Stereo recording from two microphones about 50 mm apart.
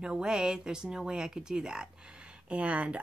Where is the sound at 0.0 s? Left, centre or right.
Centre.